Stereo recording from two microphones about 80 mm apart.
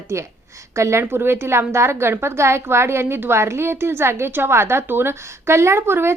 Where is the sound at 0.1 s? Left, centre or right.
Right.